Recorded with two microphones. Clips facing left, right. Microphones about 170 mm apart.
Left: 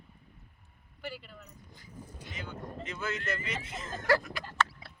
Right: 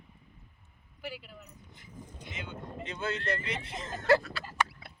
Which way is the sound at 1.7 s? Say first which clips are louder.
Even; 25° right (ahead or behind).